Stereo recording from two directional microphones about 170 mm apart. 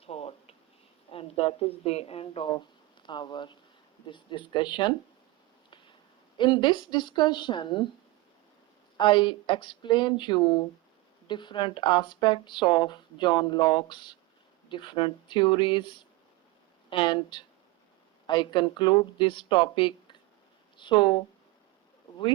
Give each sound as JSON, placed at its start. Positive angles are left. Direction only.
{"t": 0.0, "sound": "a sound", "side_deg": 35}
{"t": 1.1, "sound": "speech", "side_deg": 35}
{"t": 6.3, "sound": "speech", "side_deg": 25}
{"t": 9.0, "sound": "speech", "side_deg": 25}